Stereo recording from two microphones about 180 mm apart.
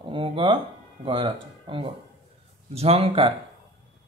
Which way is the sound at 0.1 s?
25° right (ahead or behind).